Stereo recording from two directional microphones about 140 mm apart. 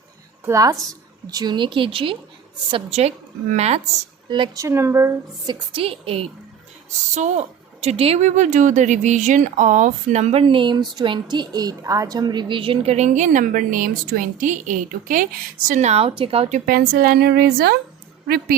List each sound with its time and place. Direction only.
0.4 s a woman's voice: 25° right (ahead or behind); by 2.1 s 40° right (ahead or behind)
3.5 s a woman's voice: 50° right (ahead or behind)
4.3 s speech: 35° right (ahead or behind)
4.6 s a woman's voice: 20° right (ahead or behind)
5.7 s a woman's voice: 40° right (ahead or behind)
7.1 s a woman's voice: 55° right (ahead or behind)
16.5 s speech: 90° right